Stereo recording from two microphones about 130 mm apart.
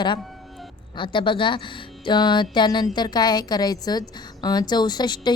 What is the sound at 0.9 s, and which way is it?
Speech, 40° left (ahead or behind).